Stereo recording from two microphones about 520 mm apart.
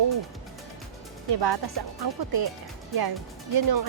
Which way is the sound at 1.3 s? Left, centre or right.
Right.